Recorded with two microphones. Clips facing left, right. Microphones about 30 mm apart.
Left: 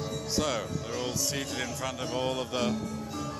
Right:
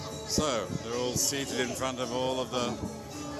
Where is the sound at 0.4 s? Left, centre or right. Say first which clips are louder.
Right 1 dB; centre.